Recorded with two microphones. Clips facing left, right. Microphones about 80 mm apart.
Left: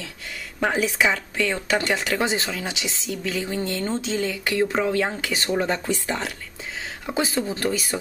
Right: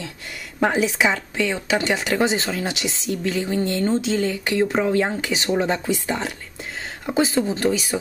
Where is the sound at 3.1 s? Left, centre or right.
Right.